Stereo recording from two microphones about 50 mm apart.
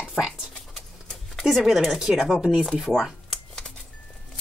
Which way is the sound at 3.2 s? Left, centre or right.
Centre.